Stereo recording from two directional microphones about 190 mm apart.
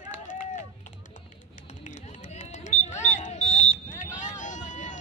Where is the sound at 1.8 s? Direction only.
40° left (ahead or behind).